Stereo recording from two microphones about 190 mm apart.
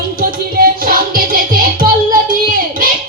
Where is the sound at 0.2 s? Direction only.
50° right (ahead or behind).